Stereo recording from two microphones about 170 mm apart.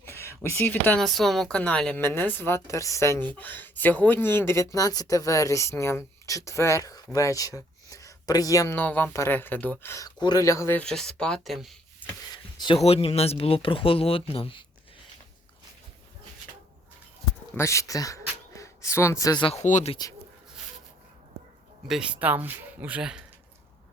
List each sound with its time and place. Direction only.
0.0 s speech: 15° left (ahead or behind); by 11.8 s centre (ahead or behind)
12.3 s speech: 30° left (ahead or behind)
17.5 s speech: 15° left (ahead or behind)
19.5 s speech: 45° left (ahead or behind)
19.9 s speech: 20° left (ahead or behind)
21.8 s speech: 5° right (ahead or behind)